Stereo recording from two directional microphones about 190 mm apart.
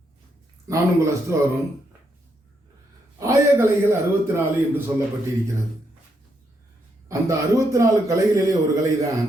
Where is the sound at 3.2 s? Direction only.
15° right (ahead or behind).